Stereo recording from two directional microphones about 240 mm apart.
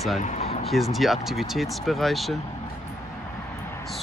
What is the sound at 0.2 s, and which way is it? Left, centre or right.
Speech, left.